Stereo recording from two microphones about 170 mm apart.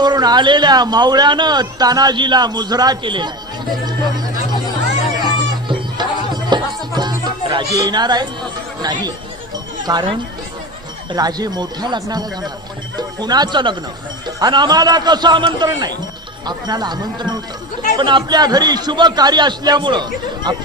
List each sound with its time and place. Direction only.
0.0 s a man's voice: 25° right (ahead or behind)
5.6 s music: 25° right (ahead or behind)
8.8 s a man's voice: 25° right (ahead or behind)